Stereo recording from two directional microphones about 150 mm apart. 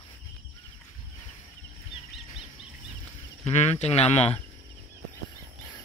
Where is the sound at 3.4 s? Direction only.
45° left (ahead or behind).